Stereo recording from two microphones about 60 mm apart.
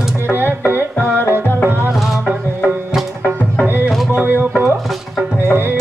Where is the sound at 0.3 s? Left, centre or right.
Right.